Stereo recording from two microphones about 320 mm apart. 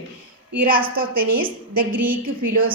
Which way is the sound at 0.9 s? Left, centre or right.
Right.